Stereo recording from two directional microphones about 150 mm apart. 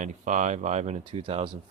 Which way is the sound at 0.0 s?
55° right (ahead or behind).